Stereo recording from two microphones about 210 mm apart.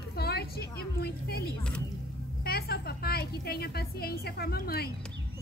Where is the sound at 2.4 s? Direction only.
45° left (ahead or behind).